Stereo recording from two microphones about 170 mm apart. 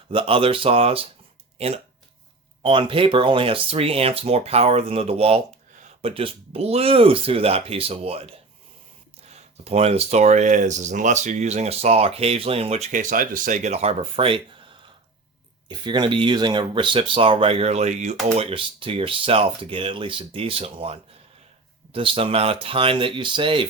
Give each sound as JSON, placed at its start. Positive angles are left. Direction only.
{"t": 0.1, "sound": "speech", "side_deg": -30}
{"t": 18.3, "sound": "speech", "side_deg": -30}